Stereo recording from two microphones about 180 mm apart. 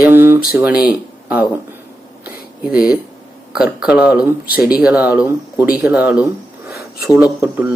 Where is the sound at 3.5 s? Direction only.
5° right (ahead or behind).